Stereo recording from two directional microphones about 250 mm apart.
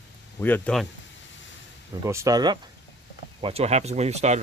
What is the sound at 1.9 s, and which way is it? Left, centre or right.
Speech, centre.